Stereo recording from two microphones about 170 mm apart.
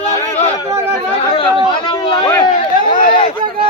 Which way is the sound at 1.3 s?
30° left (ahead or behind).